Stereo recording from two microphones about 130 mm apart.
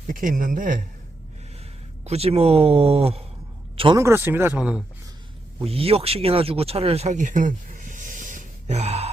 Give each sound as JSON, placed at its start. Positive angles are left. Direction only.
{"t": 0.1, "sound": "speech", "side_deg": -90}
{"t": 2.0, "sound": "speech", "side_deg": -50}
{"t": 3.9, "sound": "speech", "side_deg": -20}
{"t": 5.5, "sound": "speech", "side_deg": -45}